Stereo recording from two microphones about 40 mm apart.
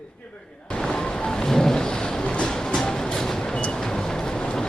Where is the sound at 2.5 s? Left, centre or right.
Centre.